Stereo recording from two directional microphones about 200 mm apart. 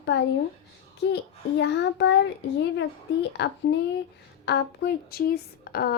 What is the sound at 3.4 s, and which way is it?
Child singing, 60° left (ahead or behind).